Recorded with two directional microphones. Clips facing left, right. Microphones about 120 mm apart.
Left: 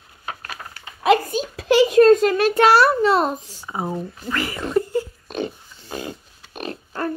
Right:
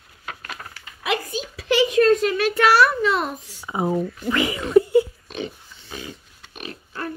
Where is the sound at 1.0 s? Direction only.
40° left (ahead or behind).